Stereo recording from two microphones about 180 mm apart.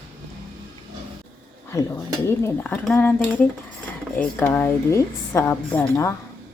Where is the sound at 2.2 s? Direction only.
10° left (ahead or behind).